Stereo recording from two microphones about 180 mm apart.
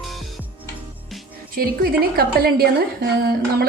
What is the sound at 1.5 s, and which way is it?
A woman's voice, 55° right (ahead or behind).